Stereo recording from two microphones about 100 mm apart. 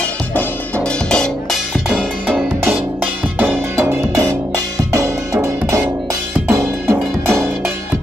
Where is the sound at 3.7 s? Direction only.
25° right (ahead or behind).